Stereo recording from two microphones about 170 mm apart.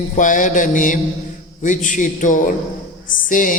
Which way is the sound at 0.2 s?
50° left (ahead or behind).